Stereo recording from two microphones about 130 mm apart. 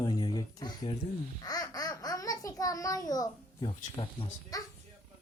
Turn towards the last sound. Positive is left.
turn(degrees=25)  # may be behind; listen again after turning